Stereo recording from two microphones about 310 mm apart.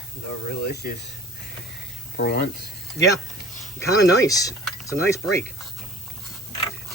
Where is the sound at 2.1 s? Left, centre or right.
Left.